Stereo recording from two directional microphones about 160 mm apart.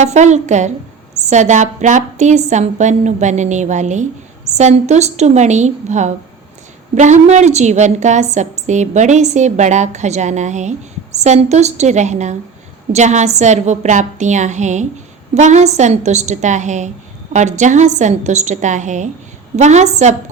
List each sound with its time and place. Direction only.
0.0 s a woman's voice: 45° right (ahead or behind)